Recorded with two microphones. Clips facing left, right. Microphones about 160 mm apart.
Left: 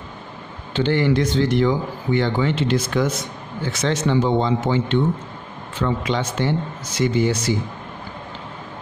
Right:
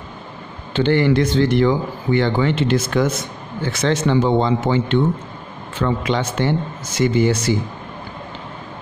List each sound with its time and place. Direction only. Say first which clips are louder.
0.7 s speech: right 3 dB; 60° right (ahead or behind)